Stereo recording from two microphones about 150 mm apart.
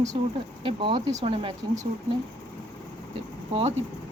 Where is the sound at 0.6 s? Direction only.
35° right (ahead or behind).